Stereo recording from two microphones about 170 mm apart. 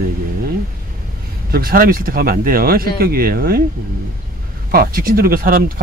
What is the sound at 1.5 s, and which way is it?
Speech, 60° right (ahead or behind).